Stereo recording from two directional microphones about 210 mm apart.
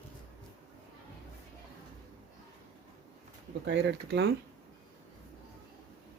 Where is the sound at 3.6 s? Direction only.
50° right (ahead or behind).